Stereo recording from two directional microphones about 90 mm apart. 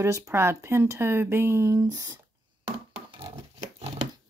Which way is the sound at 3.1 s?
90° right.